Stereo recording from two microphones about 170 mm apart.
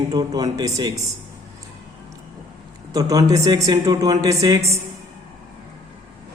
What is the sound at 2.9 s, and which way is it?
Speech, 20° right (ahead or behind).